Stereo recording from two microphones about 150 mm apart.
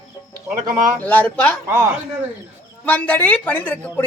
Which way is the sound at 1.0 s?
10° left (ahead or behind).